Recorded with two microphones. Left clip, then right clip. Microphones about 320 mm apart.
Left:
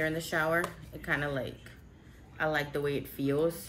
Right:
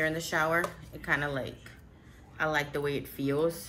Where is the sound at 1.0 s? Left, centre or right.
Centre.